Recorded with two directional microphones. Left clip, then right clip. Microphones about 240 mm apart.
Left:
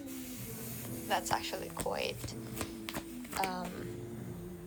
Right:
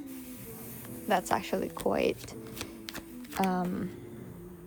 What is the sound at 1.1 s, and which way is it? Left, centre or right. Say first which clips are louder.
A woman's voice: right 5 dB; right.